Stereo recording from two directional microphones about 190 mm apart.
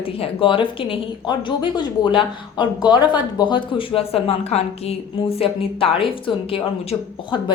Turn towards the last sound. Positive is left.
turn(degrees=25)  # may be behind; listen again after turning